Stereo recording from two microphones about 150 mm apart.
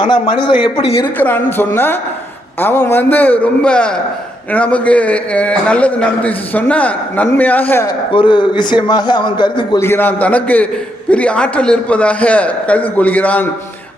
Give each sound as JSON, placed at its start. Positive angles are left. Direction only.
{"t": 0.0, "sound": "a man's voice", "side_deg": 30}
{"t": 1.2, "sound": "a man's voice", "side_deg": 15}
{"t": 8.1, "sound": "a man's voice", "side_deg": 35}
{"t": 9.8, "sound": "a man's voice", "side_deg": 15}